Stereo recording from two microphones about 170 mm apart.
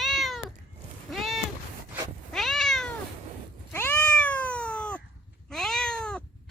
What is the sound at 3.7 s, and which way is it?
Cat, 15° left (ahead or behind).